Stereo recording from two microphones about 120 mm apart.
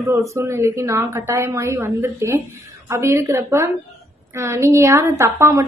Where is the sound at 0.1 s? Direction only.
25° right (ahead or behind).